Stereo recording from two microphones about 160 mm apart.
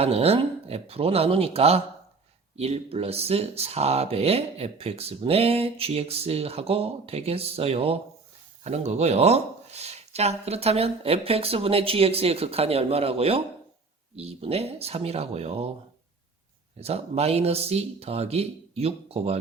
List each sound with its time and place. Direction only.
0.0 s speech: 40° right (ahead or behind)
16.7 s speech: 40° right (ahead or behind)